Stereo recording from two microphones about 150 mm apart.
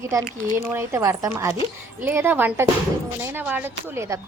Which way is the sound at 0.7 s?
20° right (ahead or behind).